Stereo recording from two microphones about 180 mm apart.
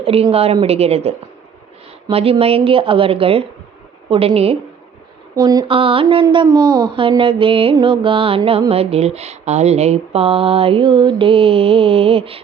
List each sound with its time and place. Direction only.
0.0 s speech: 30° right (ahead or behind)
5.4 s speech: 20° right (ahead or behind)